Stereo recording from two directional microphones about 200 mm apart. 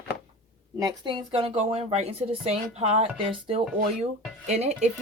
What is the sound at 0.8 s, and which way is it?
Speech, 20° right (ahead or behind).